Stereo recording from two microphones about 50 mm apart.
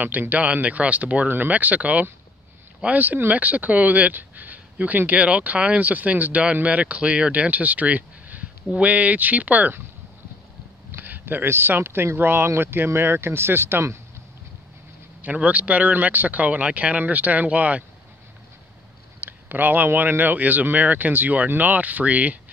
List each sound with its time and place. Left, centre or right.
0.0 s speech: right
11.0 s speech: right
15.2 s speech: right
19.1 s speech: right